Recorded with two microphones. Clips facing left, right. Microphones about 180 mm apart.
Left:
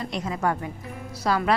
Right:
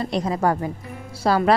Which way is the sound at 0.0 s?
35° right (ahead or behind).